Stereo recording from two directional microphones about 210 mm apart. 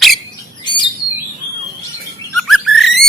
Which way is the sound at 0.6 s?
20° left (ahead or behind).